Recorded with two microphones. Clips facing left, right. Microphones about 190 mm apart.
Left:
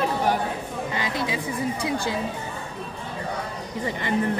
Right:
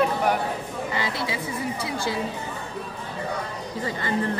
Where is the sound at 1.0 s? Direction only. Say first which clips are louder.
Left 1 dB; 15° left (ahead or behind).